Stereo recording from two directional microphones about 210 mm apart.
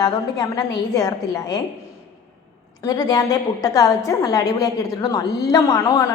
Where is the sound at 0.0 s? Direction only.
20° left (ahead or behind).